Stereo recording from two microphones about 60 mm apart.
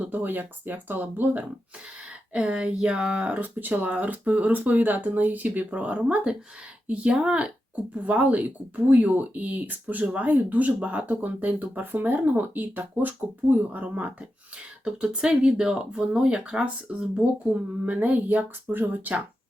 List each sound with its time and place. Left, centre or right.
0.0 s speech: right
2.3 s speech: centre
14.8 s speech: centre